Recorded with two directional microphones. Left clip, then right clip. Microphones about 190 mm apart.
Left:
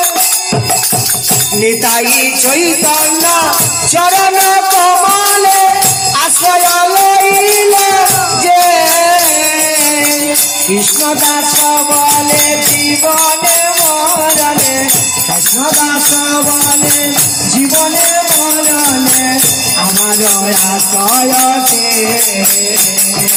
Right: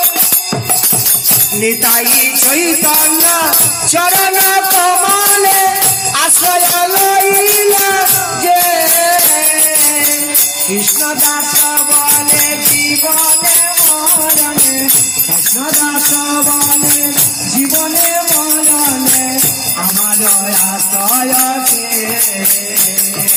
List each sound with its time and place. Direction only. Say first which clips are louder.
2.2 s jingle bell: left 2 dB; 15° right (ahead or behind)
3.9 s music: left 4 dB; 30° right (ahead or behind)
8.4 s music: left 3 dB; 20° right (ahead or behind)